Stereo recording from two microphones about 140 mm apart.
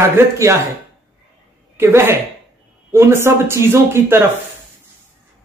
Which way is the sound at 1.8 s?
15° right (ahead or behind).